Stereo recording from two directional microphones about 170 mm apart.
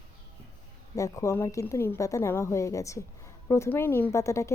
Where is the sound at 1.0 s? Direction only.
20° left (ahead or behind).